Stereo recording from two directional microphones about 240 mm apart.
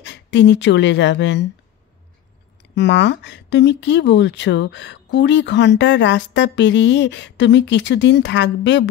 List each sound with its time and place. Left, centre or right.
0.0 s speech: left
2.7 s speech: left